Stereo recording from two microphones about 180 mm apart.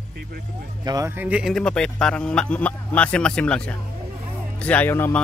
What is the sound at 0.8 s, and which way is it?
A man's voice, 20° right (ahead or behind).